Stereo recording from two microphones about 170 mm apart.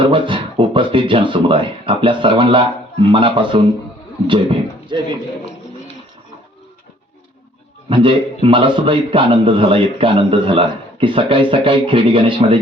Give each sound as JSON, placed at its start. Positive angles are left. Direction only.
{"t": 0.0, "sound": "a man's voice", "side_deg": -30}
{"t": 7.9, "sound": "a man's voice", "side_deg": -30}